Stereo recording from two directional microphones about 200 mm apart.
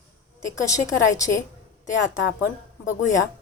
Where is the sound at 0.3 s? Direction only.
15° left (ahead or behind).